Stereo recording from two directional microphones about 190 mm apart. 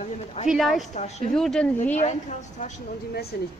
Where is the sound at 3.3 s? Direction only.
55° left (ahead or behind).